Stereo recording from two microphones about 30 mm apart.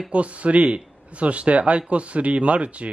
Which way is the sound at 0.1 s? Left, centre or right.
Right.